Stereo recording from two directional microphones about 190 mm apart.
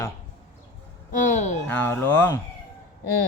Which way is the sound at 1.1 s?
40° left (ahead or behind).